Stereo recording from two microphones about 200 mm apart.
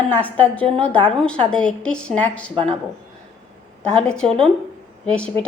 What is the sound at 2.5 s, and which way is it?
Speech, 30° right (ahead or behind).